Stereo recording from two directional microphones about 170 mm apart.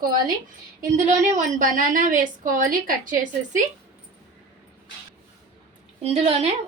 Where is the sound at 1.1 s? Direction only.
45° right (ahead or behind).